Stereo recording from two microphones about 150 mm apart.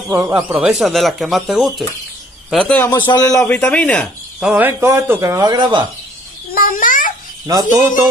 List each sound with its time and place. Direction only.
0.1 s speech: 15° right (ahead or behind); by 2.9 s 10° left (ahead or behind)
2.9 s a man's voice: 30° left (ahead or behind)
3.3 s speech: 5° left (ahead or behind)
4.4 s speech: 10° right (ahead or behind); by 5.9 s 30° right (ahead or behind)
6.5 s babbling: 65° left (ahead or behind)
7.5 s speech: 25° right (ahead or behind)